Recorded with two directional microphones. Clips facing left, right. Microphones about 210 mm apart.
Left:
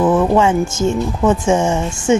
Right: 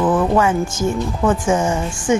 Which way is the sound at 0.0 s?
25° left (ahead or behind).